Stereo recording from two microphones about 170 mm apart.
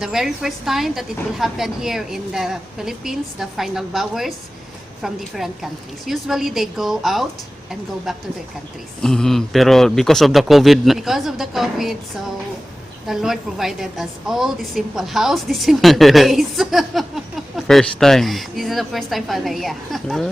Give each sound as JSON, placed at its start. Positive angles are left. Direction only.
{"t": 0.0, "sound": "a woman's voice", "side_deg": 0}
{"t": 13.1, "sound": "a woman's voice", "side_deg": 0}